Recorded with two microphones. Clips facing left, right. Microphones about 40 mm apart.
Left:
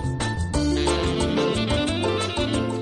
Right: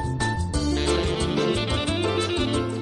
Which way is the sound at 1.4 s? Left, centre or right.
Centre.